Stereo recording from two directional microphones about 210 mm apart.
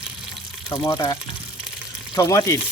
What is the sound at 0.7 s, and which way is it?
Speech, 15° left (ahead or behind).